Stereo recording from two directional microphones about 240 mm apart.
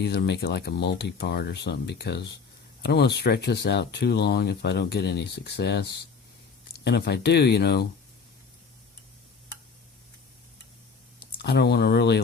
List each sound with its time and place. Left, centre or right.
0.0 s speech: left
11.2 s speech: left